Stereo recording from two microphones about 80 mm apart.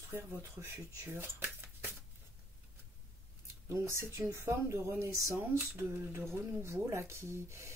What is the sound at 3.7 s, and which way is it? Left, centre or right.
Speech, right.